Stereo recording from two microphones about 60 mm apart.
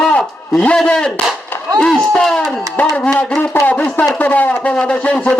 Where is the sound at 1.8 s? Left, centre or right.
Centre.